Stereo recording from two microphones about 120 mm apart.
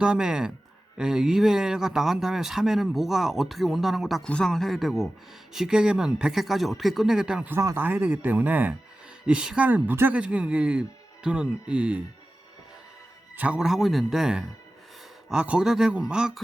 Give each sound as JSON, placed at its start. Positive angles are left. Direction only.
{"t": 0.0, "sound": "speech", "side_deg": -5}
{"t": 7.5, "sound": "speech", "side_deg": -20}
{"t": 13.3, "sound": "speech", "side_deg": -10}